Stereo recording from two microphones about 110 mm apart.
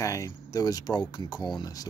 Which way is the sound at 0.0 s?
30° left (ahead or behind).